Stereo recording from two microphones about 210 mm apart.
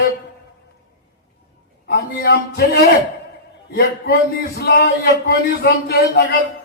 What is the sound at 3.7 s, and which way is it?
A man's voice, 50° left (ahead or behind).